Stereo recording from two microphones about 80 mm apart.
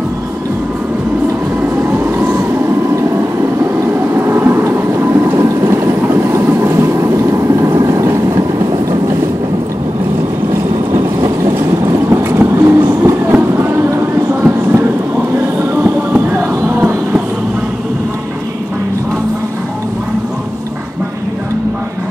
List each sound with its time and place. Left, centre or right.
1.8 s vehicle: right
4.1 s train: right
10.9 s vehicle: right
13.3 s boat: right
14.4 s a sound: right
15.7 s music: right